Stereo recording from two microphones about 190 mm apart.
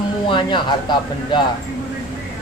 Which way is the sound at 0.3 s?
25° left (ahead or behind).